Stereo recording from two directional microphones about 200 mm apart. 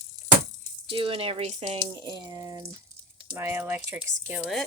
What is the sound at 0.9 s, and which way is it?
Speech, 25° right (ahead or behind).